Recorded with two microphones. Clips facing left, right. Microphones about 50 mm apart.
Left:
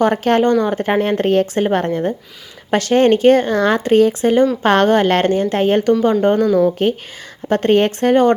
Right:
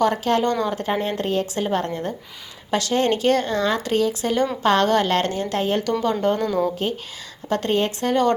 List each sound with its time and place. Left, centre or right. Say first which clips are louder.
0.0 s speech: left 5 dB; left